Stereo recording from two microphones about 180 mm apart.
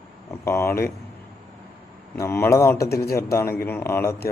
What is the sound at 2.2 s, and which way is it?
A man's voice, 15° left (ahead or behind).